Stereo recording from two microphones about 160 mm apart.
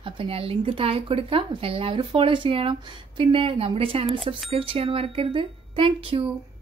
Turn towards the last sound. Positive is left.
turn(degrees=-35)  # may be behind; listen again after turning